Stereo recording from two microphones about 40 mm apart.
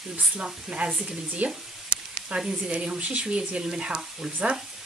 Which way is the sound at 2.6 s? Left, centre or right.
Right.